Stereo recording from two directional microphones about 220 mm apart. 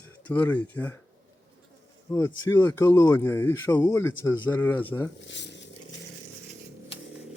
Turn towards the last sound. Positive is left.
turn(degrees=55)  # may be behind; listen again after turning